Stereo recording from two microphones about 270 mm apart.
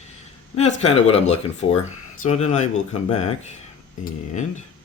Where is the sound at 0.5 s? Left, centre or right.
Left.